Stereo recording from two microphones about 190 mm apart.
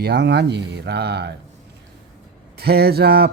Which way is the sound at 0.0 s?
60° right (ahead or behind).